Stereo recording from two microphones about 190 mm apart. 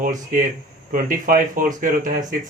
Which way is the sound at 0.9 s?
45° right (ahead or behind).